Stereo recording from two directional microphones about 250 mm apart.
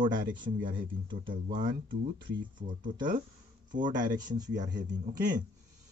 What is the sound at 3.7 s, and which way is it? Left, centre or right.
Speech, right.